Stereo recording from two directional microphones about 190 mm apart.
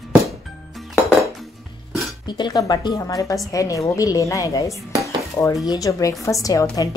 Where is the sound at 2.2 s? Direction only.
20° left (ahead or behind).